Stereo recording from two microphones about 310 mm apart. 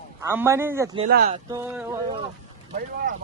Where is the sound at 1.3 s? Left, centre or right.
Centre.